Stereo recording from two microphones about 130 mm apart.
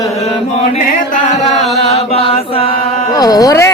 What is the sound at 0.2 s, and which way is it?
Chant, 55° left (ahead or behind).